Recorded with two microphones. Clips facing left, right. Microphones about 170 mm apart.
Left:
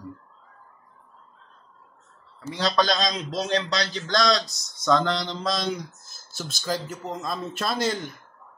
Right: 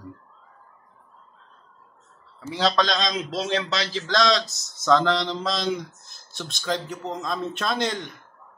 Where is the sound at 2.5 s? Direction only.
Centre (ahead or behind).